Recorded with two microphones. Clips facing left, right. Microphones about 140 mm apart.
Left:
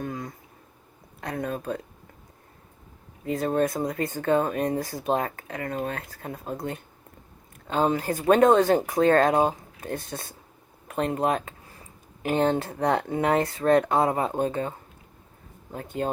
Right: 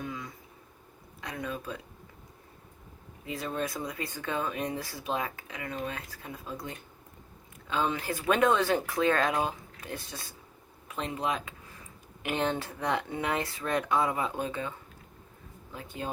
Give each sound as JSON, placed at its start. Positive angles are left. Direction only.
{"t": 0.0, "sound": "a sound", "side_deg": 45}
{"t": 1.2, "sound": "speech", "side_deg": 50}
{"t": 3.2, "sound": "speech", "side_deg": 45}
{"t": 11.7, "sound": "speech", "side_deg": 35}